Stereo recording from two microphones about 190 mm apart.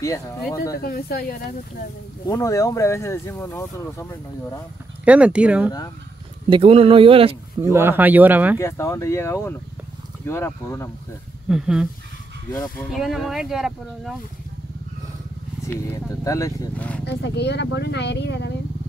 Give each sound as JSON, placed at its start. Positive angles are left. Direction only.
{"t": 0.0, "sound": "speech", "side_deg": 15}
{"t": 0.7, "sound": "speech", "side_deg": 50}
{"t": 2.2, "sound": "speech", "side_deg": 15}
{"t": 5.0, "sound": "speech", "side_deg": -5}
{"t": 6.5, "sound": "speech", "side_deg": -30}
{"t": 7.7, "sound": "speech", "side_deg": -10}
{"t": 8.5, "sound": "speech", "side_deg": 15}
{"t": 11.4, "sound": "speech", "side_deg": -5}
{"t": 12.9, "sound": "speech", "side_deg": 0}
{"t": 16.3, "sound": "speech", "side_deg": 15}
{"t": 17.0, "sound": "speech", "side_deg": 65}